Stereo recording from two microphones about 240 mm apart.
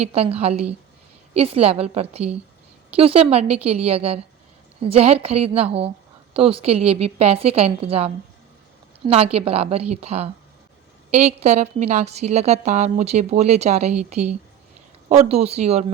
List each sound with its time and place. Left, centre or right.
0.0 s a woman's voice: right
15.1 s a woman's voice: right